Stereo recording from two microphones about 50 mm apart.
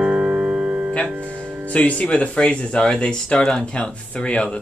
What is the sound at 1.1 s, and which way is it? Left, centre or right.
Music, right.